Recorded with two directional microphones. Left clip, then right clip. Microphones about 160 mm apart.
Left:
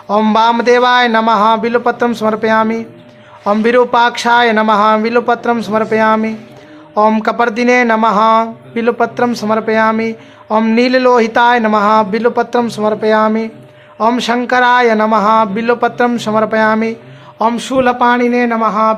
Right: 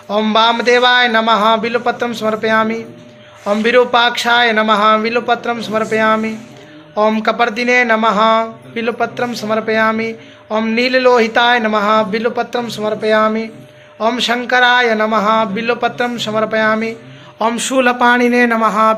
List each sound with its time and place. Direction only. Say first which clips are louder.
0.1 s speech: left 2 dB; 40° left (ahead or behind)
17.3 s speech: left 2 dB; 25° left (ahead or behind)